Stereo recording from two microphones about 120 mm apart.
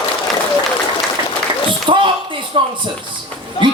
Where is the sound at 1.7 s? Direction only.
40° right (ahead or behind).